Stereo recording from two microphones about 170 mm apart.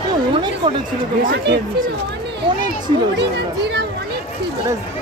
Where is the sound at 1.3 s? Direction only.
80° right.